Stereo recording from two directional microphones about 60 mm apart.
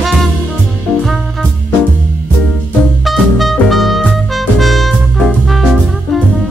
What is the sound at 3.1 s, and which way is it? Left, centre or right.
Music, centre.